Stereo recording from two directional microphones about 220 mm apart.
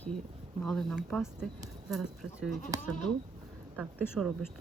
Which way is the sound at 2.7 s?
15° right (ahead or behind).